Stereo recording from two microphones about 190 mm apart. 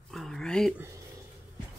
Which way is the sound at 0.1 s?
Centre (ahead or behind).